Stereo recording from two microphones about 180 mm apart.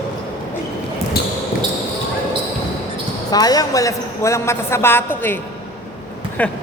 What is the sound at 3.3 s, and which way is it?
A woman's voice, 20° left (ahead or behind).